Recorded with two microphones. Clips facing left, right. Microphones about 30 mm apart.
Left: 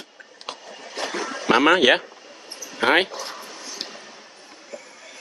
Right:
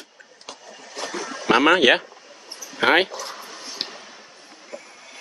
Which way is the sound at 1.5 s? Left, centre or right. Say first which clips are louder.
Even; centre.